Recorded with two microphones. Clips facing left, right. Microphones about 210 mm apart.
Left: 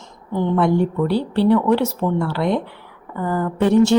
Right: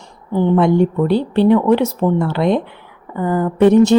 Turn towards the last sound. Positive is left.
turn(degrees=-20)  # may be behind; listen again after turning